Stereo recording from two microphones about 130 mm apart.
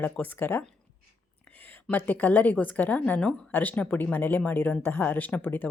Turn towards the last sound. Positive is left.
turn(degrees=15)  # may be behind; listen again after turning